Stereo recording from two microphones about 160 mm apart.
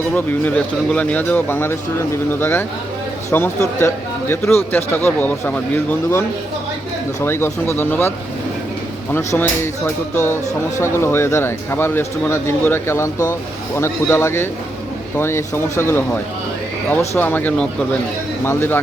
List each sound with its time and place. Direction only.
0.3 s speech: 10° left (ahead or behind)
7.3 s speech: 15° left (ahead or behind)
9.1 s speech: 15° left (ahead or behind)
17.2 s speech: 10° left (ahead or behind)